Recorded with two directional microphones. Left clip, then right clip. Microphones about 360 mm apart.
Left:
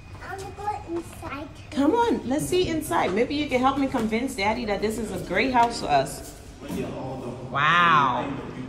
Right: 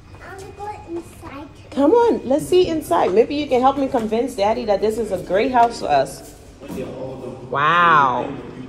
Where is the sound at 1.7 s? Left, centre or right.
Centre.